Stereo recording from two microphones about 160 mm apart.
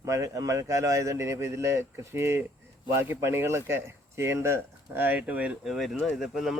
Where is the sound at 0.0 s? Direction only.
20° right (ahead or behind).